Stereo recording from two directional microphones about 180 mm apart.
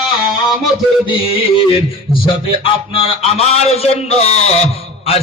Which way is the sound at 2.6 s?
30° left (ahead or behind).